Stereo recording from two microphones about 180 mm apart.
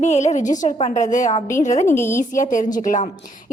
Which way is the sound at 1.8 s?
15° left (ahead or behind).